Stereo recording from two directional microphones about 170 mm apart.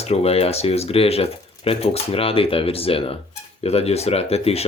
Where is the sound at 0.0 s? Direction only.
35° left (ahead or behind).